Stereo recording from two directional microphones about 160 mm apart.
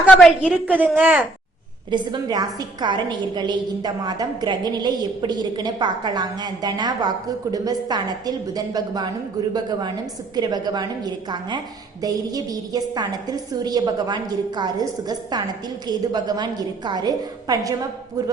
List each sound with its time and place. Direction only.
0.1 s a woman's voice: centre (ahead or behind)
1.9 s a woman's voice: 25° right (ahead or behind)